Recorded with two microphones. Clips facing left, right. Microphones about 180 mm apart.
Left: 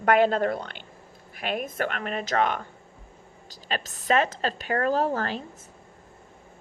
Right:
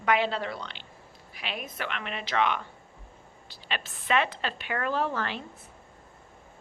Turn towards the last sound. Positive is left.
turn(degrees=40)  # may be behind; listen again after turning